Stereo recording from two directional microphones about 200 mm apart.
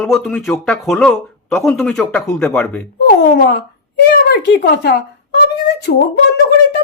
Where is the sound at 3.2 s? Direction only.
55° left (ahead or behind).